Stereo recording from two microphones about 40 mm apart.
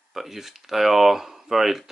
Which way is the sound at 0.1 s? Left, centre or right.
Centre.